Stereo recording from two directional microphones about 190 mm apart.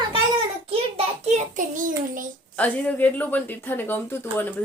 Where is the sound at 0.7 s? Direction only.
35° right (ahead or behind).